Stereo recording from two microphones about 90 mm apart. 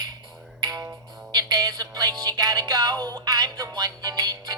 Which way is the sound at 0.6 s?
45° right (ahead or behind).